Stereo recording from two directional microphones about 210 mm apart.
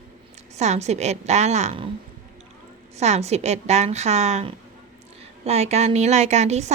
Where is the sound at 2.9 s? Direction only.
30° right (ahead or behind).